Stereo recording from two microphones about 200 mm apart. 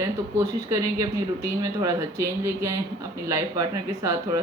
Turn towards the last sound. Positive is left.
turn(degrees=-15)  # may be behind; listen again after turning